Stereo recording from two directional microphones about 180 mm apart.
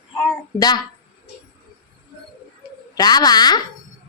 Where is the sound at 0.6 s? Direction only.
20° left (ahead or behind).